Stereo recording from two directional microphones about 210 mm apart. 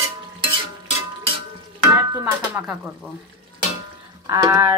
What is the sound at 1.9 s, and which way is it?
Speech, 15° right (ahead or behind).